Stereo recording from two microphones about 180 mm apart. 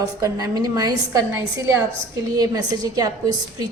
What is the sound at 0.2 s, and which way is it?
Speech, 20° right (ahead or behind).